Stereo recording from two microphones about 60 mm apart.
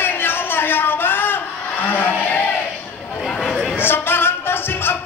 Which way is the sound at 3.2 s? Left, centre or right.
Centre.